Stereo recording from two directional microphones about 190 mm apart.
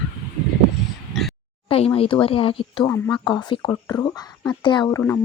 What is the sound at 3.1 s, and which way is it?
Speech, 25° left (ahead or behind).